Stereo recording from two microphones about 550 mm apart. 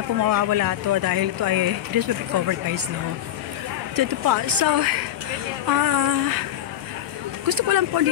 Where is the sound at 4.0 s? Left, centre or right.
Right.